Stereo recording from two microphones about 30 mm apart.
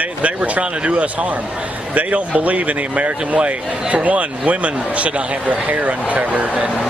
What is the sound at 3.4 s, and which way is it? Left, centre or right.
Speech, right.